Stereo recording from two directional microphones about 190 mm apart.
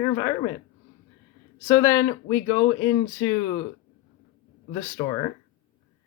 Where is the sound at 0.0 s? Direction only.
20° left (ahead or behind).